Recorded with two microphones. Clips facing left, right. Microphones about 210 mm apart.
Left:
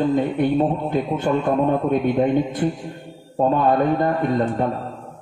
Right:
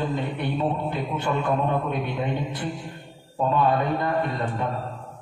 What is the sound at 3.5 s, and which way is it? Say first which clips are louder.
A man's voice: left 3 dB; 45° left (ahead or behind).